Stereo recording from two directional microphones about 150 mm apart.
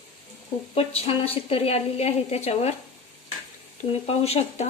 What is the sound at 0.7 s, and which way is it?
A woman's voice, 40° left (ahead or behind).